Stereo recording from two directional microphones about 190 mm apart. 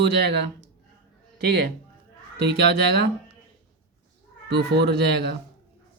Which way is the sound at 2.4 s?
60° right (ahead or behind).